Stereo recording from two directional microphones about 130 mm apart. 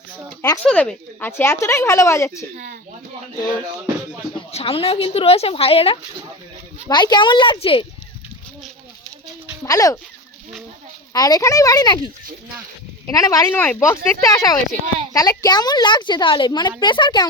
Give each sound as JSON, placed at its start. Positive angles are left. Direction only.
{"t": 0.6, "sound": "speech", "side_deg": 5}
{"t": 1.2, "sound": "a woman's voice", "side_deg": 20}
{"t": 4.5, "sound": "a woman's voice", "side_deg": 45}
{"t": 6.8, "sound": "a woman's voice", "side_deg": 35}
{"t": 9.6, "sound": "a woman's voice", "side_deg": 25}
{"t": 11.1, "sound": "a woman's voice", "side_deg": 30}
{"t": 13.5, "sound": "a woman's voice", "side_deg": 15}